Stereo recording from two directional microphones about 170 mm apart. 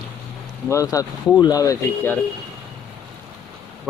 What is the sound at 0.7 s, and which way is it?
Speech, 20° left (ahead or behind).